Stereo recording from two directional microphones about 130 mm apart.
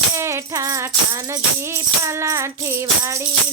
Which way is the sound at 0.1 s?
20° right (ahead or behind).